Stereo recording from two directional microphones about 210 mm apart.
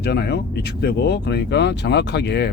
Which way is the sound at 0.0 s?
50° left (ahead or behind).